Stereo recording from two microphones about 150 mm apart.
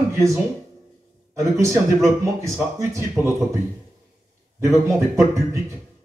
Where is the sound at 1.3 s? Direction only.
20° right (ahead or behind).